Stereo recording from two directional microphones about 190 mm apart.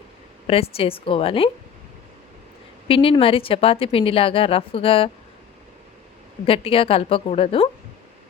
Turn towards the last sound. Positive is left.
turn(degrees=30)  # may be behind; listen again after turning